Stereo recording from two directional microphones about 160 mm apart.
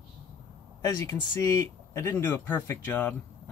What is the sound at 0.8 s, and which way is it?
Speech, 15° left (ahead or behind).